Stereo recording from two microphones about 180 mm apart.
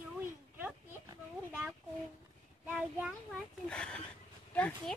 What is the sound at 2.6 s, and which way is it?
Child singing, 10° right (ahead or behind).